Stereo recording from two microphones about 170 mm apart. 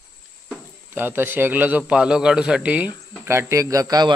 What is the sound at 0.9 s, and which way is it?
A man's voice, 10° right (ahead or behind).